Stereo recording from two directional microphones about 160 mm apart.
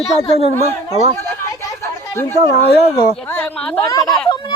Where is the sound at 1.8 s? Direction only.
15° left (ahead or behind).